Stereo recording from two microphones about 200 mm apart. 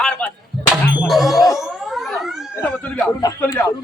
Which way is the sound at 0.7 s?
Centre (ahead or behind).